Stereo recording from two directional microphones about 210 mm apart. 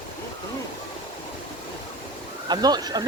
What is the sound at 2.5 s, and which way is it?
Speech, 20° right (ahead or behind).